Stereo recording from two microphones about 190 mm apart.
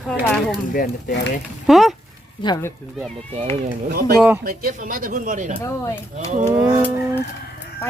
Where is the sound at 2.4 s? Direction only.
20° left (ahead or behind).